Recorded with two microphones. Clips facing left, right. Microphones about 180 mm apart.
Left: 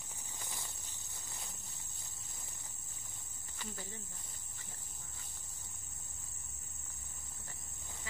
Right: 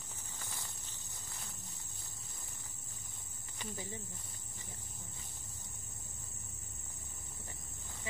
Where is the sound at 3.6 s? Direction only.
15° right (ahead or behind).